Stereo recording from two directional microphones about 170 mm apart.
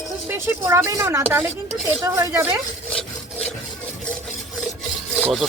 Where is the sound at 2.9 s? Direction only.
5° left (ahead or behind).